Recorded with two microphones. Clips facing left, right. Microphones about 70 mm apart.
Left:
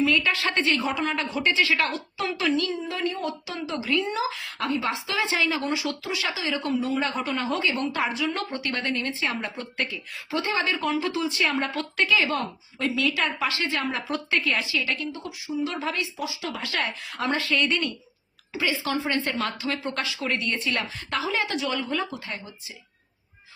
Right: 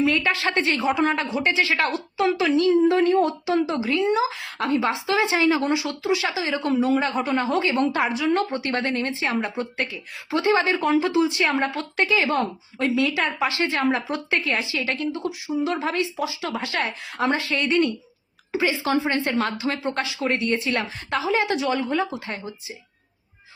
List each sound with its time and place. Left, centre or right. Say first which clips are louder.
0.0 s a woman's voice: right 2 dB; right
1.0 s speech: right 3 dB; right
7.2 s speech: right 4 dB; right
13.6 s speech: right 6 dB; right
14.3 s speech: even; right